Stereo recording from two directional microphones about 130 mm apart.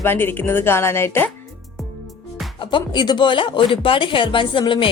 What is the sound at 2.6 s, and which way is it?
A woman's voice, 35° left (ahead or behind).